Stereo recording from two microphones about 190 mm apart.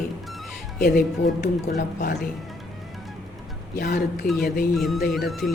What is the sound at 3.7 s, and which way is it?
Speech, 55° left (ahead or behind).